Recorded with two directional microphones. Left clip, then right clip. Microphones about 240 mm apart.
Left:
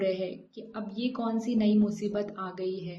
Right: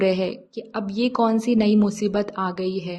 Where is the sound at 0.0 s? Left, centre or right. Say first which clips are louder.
Right 8 dB; right.